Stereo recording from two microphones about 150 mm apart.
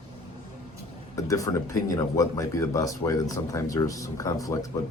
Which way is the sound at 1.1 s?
20° left (ahead or behind).